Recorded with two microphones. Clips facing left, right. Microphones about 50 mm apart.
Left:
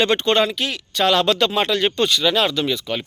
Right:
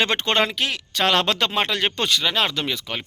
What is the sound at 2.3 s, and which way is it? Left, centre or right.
Speech, right.